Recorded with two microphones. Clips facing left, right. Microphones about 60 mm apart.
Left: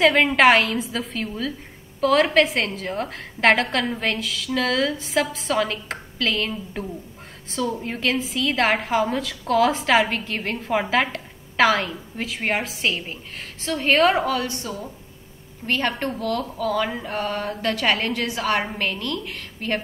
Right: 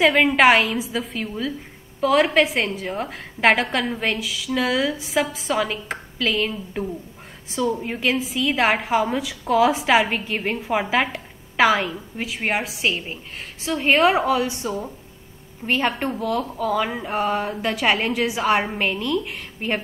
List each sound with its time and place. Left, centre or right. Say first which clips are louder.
0.0 s a woman's voice: even; centre
14.2 s speech: right 3 dB; centre